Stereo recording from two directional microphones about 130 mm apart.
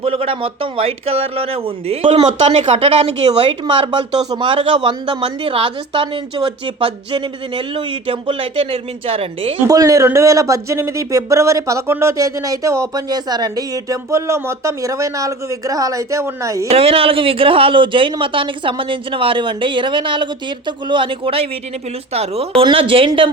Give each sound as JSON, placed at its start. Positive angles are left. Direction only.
{"t": 0.0, "sound": "a woman's voice", "side_deg": -45}
{"t": 2.4, "sound": "a woman's voice", "side_deg": -60}
{"t": 4.3, "sound": "a woman's voice", "side_deg": -40}
{"t": 9.6, "sound": "speech", "side_deg": -25}
{"t": 16.6, "sound": "a woman's voice", "side_deg": -50}